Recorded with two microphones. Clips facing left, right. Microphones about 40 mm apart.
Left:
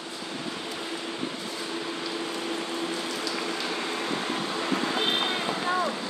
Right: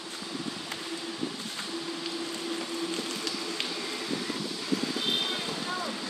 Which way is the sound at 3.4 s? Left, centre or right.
Left.